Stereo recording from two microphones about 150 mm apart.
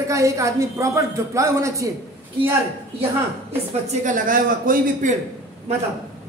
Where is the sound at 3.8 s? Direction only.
60° right (ahead or behind).